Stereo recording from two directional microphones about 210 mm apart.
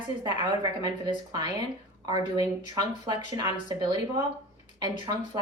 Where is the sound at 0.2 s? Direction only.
20° right (ahead or behind).